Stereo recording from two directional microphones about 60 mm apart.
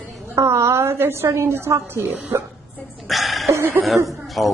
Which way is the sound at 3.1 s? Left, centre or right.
Centre.